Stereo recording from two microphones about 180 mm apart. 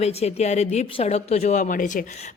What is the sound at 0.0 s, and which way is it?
A woman's voice, 35° left (ahead or behind).